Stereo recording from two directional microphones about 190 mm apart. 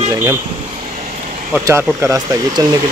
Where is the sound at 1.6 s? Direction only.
15° right (ahead or behind).